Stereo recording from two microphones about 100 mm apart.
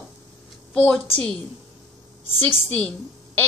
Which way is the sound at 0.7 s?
10° left (ahead or behind).